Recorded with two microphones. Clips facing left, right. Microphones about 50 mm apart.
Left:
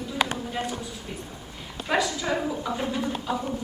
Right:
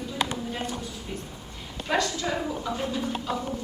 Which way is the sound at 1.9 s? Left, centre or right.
Centre.